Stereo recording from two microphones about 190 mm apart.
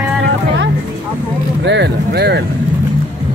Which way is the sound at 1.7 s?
65° right (ahead or behind).